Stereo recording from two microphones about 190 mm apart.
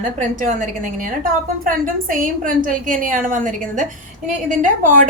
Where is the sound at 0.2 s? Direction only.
40° right (ahead or behind).